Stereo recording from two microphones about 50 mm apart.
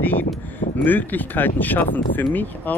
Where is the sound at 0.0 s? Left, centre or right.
Left.